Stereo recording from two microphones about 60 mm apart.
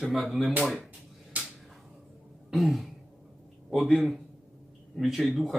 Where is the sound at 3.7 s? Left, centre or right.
Centre.